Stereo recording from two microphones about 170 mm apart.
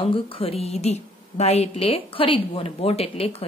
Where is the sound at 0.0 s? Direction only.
35° left (ahead or behind).